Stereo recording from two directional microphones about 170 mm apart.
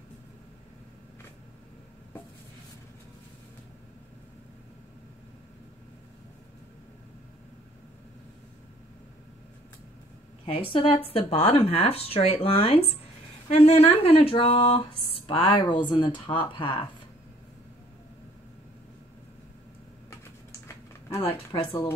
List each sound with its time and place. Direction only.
10.4 s speech: 30° left (ahead or behind)
20.6 s typing: 15° left (ahead or behind)